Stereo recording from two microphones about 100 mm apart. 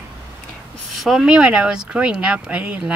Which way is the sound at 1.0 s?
5° right (ahead or behind).